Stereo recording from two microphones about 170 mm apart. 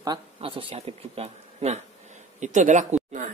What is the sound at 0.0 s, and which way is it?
Speech, 30° right (ahead or behind).